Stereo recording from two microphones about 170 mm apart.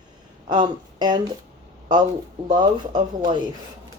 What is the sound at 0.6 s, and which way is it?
Speech, 25° right (ahead or behind).